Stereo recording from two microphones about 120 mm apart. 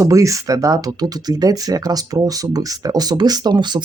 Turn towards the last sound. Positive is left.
turn(degrees=-40)  # may be behind; listen again after turning